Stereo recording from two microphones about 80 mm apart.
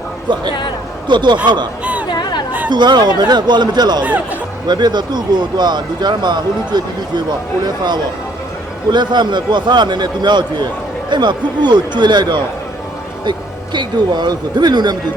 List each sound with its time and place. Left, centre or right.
1.0 s a man's voice: right
1.8 s a sound: centre
2.0 s chatter: left
2.6 s speech: right
4.0 s speech: centre
4.6 s a man's voice: right
13.7 s speech: right